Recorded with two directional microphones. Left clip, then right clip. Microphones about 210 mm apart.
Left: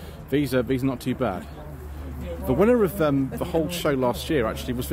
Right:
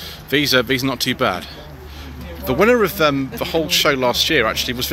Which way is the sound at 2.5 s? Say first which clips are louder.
Right 5 dB; 10° left (ahead or behind).